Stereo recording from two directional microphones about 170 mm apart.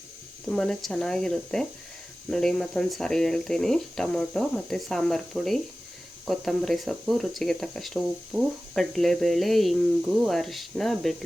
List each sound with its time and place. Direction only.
0.4 s speech: 5° left (ahead or behind)